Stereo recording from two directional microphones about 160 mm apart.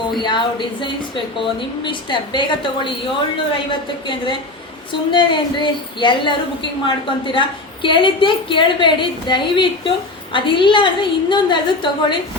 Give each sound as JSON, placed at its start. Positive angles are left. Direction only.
{"t": 0.2, "sound": "a woman's voice", "side_deg": 30}